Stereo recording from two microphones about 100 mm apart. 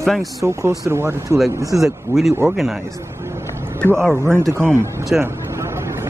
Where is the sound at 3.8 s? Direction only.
5° left (ahead or behind).